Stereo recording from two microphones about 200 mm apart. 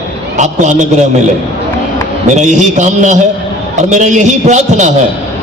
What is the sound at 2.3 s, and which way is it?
A man's voice, 35° right (ahead or behind).